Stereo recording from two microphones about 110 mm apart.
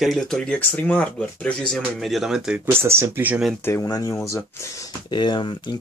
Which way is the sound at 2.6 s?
20° right (ahead or behind).